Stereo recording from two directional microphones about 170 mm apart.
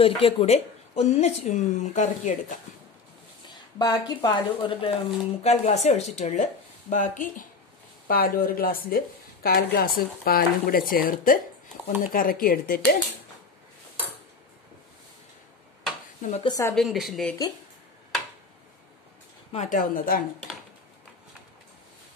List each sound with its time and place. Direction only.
0.0 s speech: 35° left (ahead or behind)
3.4 s a sound: 20° left (ahead or behind)
4.2 s speech: 30° left (ahead or behind)
5.4 s speech: 40° left (ahead or behind); by 12.9 s 60° left (ahead or behind)
16.2 s speech: 40° left (ahead or behind)
16.4 s speech: 20° left (ahead or behind)
16.7 s a woman's voice: centre (ahead or behind)
19.5 s speech: 45° left (ahead or behind)